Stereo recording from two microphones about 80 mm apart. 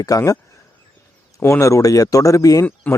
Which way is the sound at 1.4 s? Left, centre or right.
Left.